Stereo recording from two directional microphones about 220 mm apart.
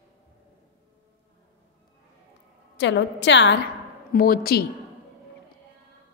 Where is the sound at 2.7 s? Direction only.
55° left (ahead or behind).